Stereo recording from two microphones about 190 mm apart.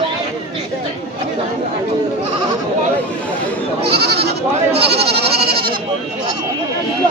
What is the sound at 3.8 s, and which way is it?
Goat, 55° right (ahead or behind).